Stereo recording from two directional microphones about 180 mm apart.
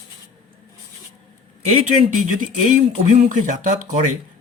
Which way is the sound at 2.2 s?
40° right (ahead or behind).